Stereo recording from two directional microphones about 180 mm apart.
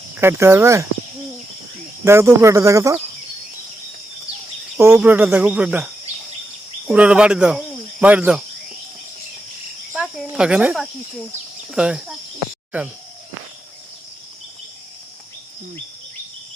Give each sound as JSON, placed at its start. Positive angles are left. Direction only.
{"t": 0.2, "sound": "cricket", "side_deg": -15}
{"t": 2.0, "sound": "cricket", "side_deg": -15}
{"t": 4.8, "sound": "cricket", "side_deg": -10}
{"t": 6.8, "sound": "speech", "side_deg": -5}
{"t": 8.0, "sound": "cricket", "side_deg": -10}
{"t": 9.9, "sound": "speech", "side_deg": -5}